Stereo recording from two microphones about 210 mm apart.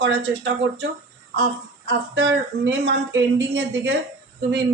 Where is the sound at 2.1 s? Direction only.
55° right (ahead or behind).